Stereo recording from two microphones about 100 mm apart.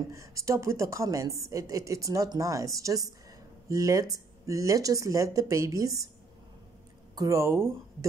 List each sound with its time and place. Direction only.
0.1 s a woman's voice: 30° right (ahead or behind)
7.2 s speech: 30° right (ahead or behind)